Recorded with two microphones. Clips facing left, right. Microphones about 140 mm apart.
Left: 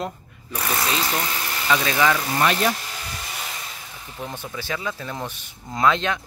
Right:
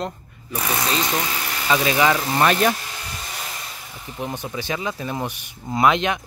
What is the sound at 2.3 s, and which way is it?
Speech, 45° right (ahead or behind).